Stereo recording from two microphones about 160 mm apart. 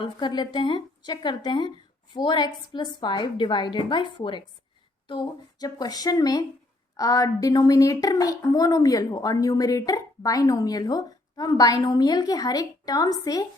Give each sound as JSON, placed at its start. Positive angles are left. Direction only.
{"t": 0.0, "sound": "a woman's voice", "side_deg": 30}